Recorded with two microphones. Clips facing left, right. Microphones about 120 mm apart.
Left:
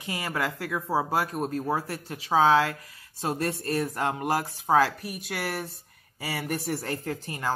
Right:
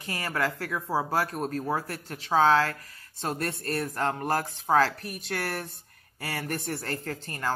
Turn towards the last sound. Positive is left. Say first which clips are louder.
# left 1 dB
turn(degrees=10)  # may be behind; listen again after turning